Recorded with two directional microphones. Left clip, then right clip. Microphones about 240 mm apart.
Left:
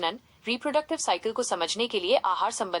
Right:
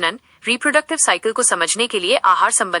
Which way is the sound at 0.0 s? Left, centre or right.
Centre.